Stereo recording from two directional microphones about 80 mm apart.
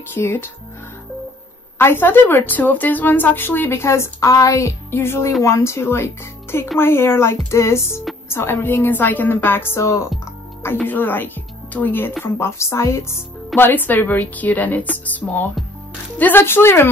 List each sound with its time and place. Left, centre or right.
0.1 s a woman's voice: left
1.8 s a woman's voice: left
10.8 s speech: left
13.6 s a woman's voice: left